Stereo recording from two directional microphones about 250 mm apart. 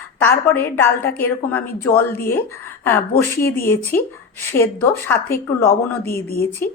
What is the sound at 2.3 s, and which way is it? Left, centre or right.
Speech, centre.